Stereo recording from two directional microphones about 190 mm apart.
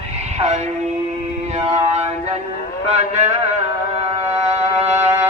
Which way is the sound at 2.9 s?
35° right (ahead or behind).